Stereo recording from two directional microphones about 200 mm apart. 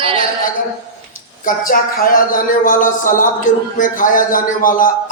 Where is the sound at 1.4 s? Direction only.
45° left (ahead or behind).